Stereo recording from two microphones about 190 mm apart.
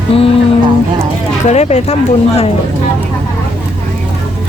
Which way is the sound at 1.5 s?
35° left (ahead or behind).